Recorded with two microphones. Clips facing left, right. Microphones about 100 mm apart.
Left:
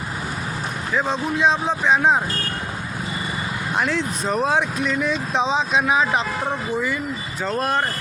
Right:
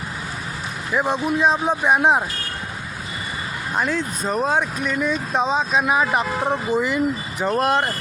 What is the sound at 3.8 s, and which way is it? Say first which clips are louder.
Speech: even; 5° right (ahead or behind).